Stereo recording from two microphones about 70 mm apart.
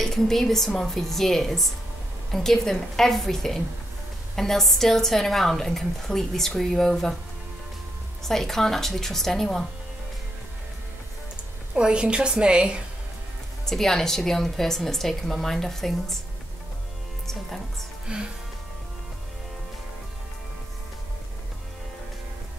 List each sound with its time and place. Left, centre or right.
0.0 s a woman's voice: centre
8.2 s a woman's voice: centre
11.7 s a woman's voice: centre
13.7 s a woman's voice: centre
18.0 s speech: centre